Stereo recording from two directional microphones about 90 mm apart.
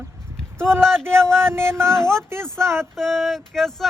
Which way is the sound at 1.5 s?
30° right (ahead or behind).